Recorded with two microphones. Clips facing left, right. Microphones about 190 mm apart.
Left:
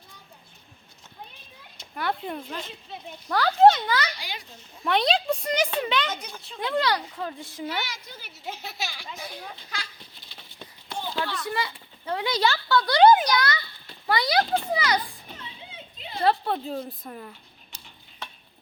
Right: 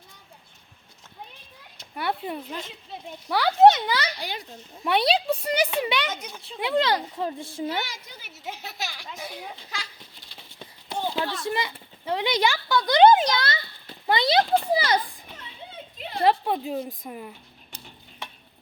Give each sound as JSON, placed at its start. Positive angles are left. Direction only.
{"t": 2.0, "sound": "a sound", "side_deg": -5}
{"t": 3.2, "sound": "speech", "side_deg": -10}
{"t": 4.8, "sound": "speech", "side_deg": -10}
{"t": 6.7, "sound": "a child's voice", "side_deg": -25}
{"t": 8.6, "sound": "a child's voice", "side_deg": 0}
{"t": 11.3, "sound": "a child's voice", "side_deg": -25}
{"t": 16.2, "sound": "speech", "side_deg": -15}